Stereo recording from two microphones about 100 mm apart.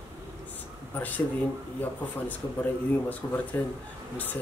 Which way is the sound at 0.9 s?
15° left (ahead or behind).